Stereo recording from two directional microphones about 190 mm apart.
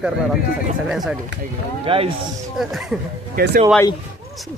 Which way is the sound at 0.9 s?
Centre (ahead or behind).